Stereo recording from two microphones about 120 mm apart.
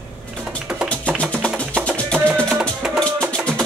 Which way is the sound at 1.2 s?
10° left (ahead or behind).